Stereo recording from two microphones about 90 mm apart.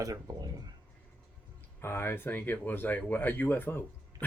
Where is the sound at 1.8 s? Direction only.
25° left (ahead or behind).